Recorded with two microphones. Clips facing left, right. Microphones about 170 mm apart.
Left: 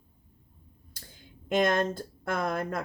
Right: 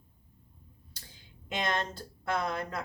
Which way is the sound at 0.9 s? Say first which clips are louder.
Left 5 dB; 50° left (ahead or behind).